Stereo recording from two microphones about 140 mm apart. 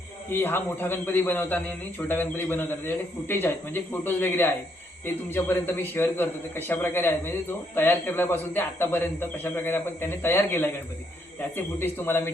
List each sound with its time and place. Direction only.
0.3 s a man's voice: 15° left (ahead or behind)